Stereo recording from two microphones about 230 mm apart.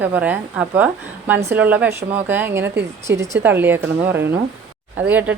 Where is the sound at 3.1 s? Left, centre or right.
Right.